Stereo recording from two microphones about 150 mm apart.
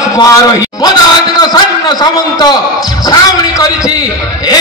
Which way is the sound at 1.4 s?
25° left (ahead or behind).